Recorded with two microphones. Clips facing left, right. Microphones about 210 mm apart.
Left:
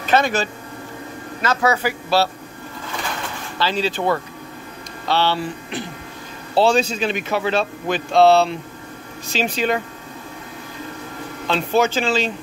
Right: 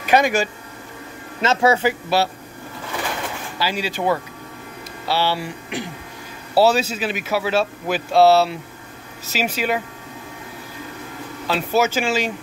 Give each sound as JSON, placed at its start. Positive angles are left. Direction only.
{"t": 0.0, "sound": "speech", "side_deg": -15}
{"t": 1.4, "sound": "a man's voice", "side_deg": -25}
{"t": 3.5, "sound": "a man's voice", "side_deg": -10}
{"t": 11.4, "sound": "a man's voice", "side_deg": -5}